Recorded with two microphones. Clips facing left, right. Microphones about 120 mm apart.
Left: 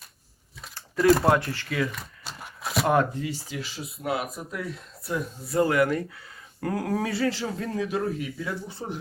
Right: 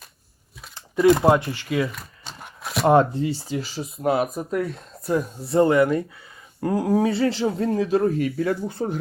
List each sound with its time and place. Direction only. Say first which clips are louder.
0.7 s a sound: right 4 dB; 20° right (ahead or behind)
1.2 s speech: right 4 dB; 15° right (ahead or behind)
1.9 s a sound: even; centre (ahead or behind)
2.8 s speech: right 7 dB; 30° right (ahead or behind)
4.2 s speech: right 9 dB; 50° right (ahead or behind)
5.5 s speech: right 5 dB; 25° right (ahead or behind)
8.0 s speech: right 9 dB; 55° right (ahead or behind)